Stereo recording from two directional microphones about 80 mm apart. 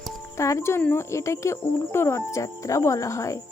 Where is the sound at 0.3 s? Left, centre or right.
Left.